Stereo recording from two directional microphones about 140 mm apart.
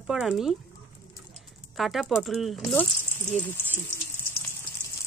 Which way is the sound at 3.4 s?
15° left (ahead or behind).